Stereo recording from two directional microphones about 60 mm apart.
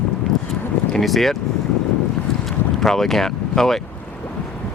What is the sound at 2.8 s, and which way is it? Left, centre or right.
Speech, centre.